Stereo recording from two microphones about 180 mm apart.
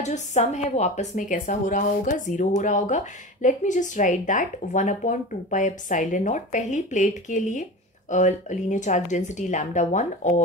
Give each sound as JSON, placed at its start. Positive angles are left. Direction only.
{"t": 0.0, "sound": "a woman's voice", "side_deg": 40}